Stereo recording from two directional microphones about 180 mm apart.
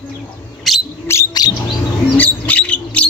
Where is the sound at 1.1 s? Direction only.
20° left (ahead or behind).